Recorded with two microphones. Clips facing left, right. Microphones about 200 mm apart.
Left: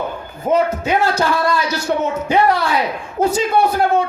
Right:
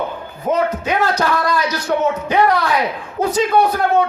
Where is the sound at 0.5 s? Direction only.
30° left (ahead or behind).